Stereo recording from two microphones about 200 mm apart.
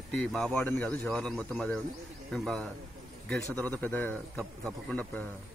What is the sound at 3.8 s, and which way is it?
Speech, 5° left (ahead or behind).